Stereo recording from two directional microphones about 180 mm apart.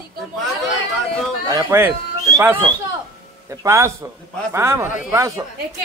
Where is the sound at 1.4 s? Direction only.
15° right (ahead or behind).